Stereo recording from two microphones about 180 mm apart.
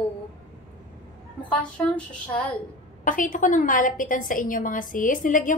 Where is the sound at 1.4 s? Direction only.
5° left (ahead or behind).